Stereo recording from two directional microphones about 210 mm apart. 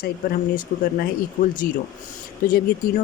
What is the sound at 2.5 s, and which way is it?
Speech, 45° left (ahead or behind).